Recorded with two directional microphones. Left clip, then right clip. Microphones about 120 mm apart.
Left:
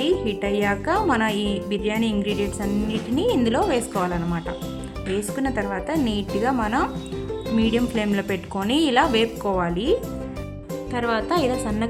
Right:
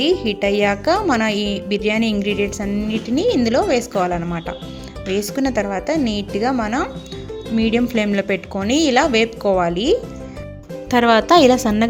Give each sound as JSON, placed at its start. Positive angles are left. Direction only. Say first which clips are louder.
{"t": 0.0, "sound": "a woman's voice", "louder": "right 5 dB", "side_deg": -30}
{"t": 11.0, "sound": "a woman's voice", "louder": "right 11 dB", "side_deg": -90}